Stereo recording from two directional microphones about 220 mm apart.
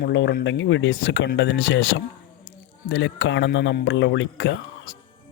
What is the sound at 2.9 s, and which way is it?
Speech, 60° left (ahead or behind).